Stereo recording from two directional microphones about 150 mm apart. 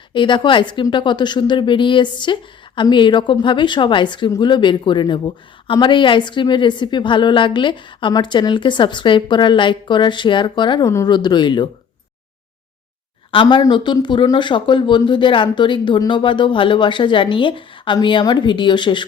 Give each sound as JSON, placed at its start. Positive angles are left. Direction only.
{"t": 0.1, "sound": "a woman's voice", "side_deg": 35}
{"t": 13.3, "sound": "a woman's voice", "side_deg": 35}